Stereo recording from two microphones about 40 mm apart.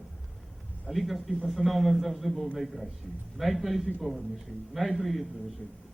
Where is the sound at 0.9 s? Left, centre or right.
Centre.